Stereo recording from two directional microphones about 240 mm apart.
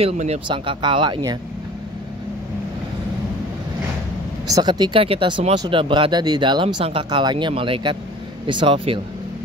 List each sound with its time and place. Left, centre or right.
0.0 s speech: right
4.5 s speech: centre